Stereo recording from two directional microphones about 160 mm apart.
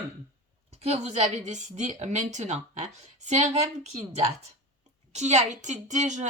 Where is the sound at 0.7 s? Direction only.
40° right (ahead or behind).